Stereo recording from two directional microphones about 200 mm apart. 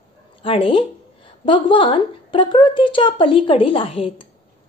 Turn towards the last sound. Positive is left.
turn(degrees=25)  # may be behind; listen again after turning